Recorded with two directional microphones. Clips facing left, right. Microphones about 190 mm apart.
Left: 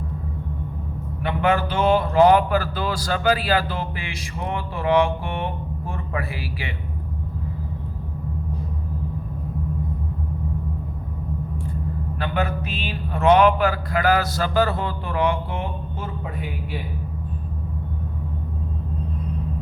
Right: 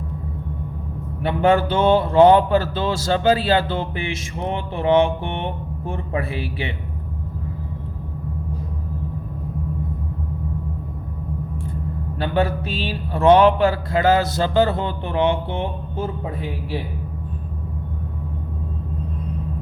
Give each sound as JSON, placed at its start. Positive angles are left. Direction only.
{"t": 1.2, "sound": "a man's voice", "side_deg": -30}
{"t": 12.2, "sound": "a man's voice", "side_deg": -30}